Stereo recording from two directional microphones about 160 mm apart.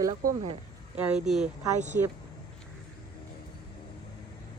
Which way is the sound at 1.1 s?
5° right (ahead or behind).